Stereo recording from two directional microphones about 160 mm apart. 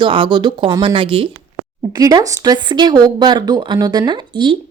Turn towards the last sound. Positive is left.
turn(degrees=-30)  # may be behind; listen again after turning